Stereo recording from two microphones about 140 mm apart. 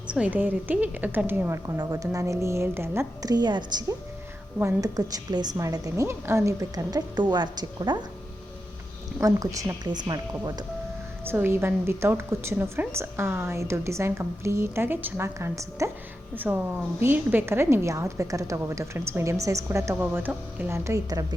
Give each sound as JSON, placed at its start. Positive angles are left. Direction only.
{"t": 0.1, "sound": "a woman's voice", "side_deg": -10}
{"t": 3.3, "sound": "a woman's voice", "side_deg": -30}
{"t": 9.2, "sound": "a woman's voice", "side_deg": -25}
{"t": 11.3, "sound": "a woman's voice", "side_deg": -15}